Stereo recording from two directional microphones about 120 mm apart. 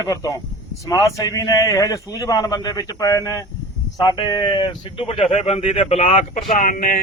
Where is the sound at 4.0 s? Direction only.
40° left (ahead or behind); by 6.3 s 60° left (ahead or behind).